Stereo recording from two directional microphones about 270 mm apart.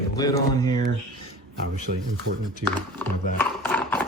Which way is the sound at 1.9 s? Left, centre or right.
Right.